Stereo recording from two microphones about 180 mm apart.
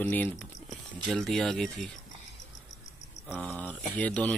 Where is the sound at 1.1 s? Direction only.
5° left (ahead or behind).